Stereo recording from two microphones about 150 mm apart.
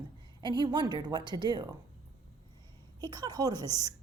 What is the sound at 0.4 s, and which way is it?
Speech, 30° right (ahead or behind).